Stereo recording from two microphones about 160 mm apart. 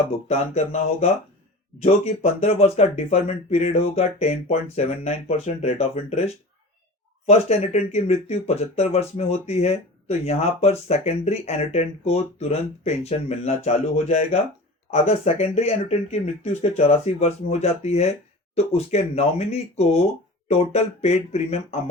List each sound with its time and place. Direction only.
0.3 s speech: 45° left (ahead or behind)